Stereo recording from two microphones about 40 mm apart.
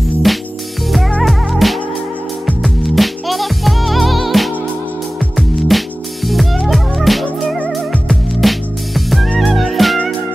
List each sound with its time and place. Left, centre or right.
0.3 s music: centre